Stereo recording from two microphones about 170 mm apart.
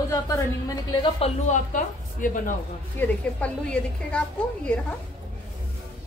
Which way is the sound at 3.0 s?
5° left (ahead or behind).